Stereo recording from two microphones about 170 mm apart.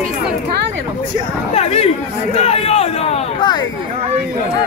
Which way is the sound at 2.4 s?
35° left (ahead or behind).